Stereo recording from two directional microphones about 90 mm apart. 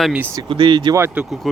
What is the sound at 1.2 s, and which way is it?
Speech, 10° right (ahead or behind).